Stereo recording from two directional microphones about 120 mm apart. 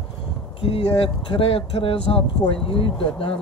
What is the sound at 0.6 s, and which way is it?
Speech, 50° left (ahead or behind).